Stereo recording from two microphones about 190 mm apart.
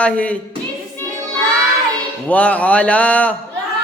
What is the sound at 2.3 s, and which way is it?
Speech, 5° left (ahead or behind).